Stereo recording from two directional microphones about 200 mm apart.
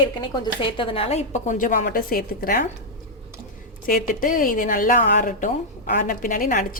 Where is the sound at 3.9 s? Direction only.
45° left (ahead or behind).